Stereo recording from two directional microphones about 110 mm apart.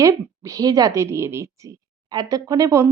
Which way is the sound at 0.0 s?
30° right (ahead or behind).